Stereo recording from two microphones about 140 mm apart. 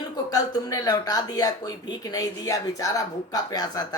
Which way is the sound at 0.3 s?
25° left (ahead or behind).